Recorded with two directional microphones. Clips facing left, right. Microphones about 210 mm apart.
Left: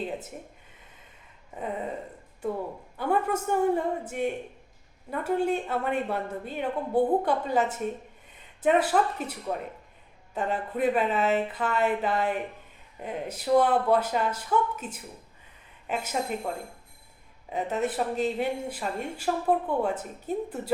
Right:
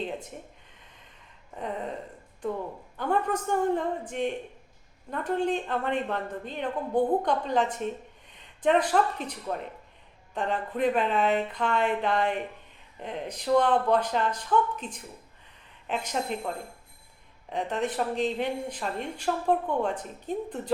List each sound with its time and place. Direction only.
0.0 s speech: 5° left (ahead or behind)
1.5 s speech: 5° left (ahead or behind)
3.0 s speech: 10° left (ahead or behind)
17.5 s speech: 5° left (ahead or behind)